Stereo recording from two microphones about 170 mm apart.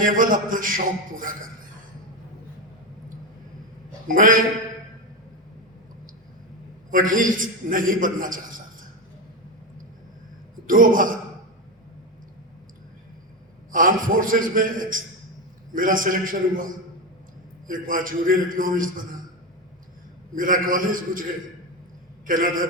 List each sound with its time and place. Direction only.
0.0 s a man's voice: 55° right (ahead or behind)
4.1 s a man's voice: 55° right (ahead or behind)
6.9 s a man's voice: 55° right (ahead or behind)
10.7 s a man's voice: 55° right (ahead or behind)
13.7 s a man's voice: 55° right (ahead or behind)
20.3 s a man's voice: 55° right (ahead or behind)
22.3 s a man's voice: 55° right (ahead or behind)